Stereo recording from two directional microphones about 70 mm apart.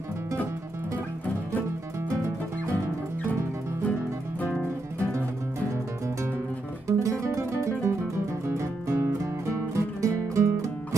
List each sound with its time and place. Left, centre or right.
6.9 s music: right